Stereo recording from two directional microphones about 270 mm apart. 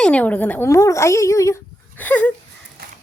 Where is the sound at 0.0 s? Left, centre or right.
Centre.